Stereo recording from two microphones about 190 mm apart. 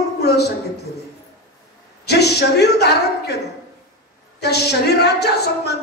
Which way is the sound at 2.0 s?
60° left (ahead or behind).